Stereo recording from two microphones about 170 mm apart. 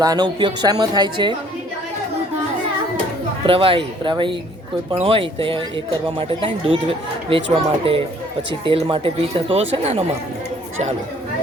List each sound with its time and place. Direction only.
0.0 s speech: 25° right (ahead or behind)
3.4 s speech: 30° right (ahead or behind)